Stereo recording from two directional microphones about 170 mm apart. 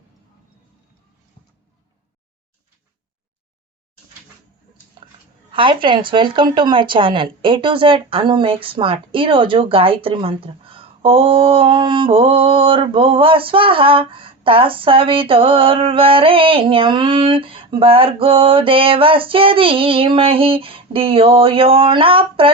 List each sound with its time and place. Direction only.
5.5 s speech: 30° right (ahead or behind)